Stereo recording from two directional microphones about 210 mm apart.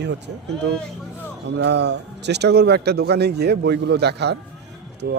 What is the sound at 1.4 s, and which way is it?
Speech, 55° right (ahead or behind).